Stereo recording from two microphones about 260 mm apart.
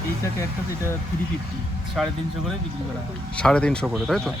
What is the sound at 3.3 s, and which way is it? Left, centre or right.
Speech, centre.